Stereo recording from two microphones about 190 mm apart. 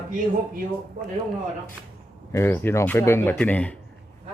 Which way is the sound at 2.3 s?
10° left (ahead or behind).